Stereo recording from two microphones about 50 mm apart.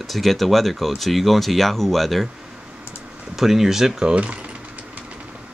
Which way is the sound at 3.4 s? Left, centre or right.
Centre.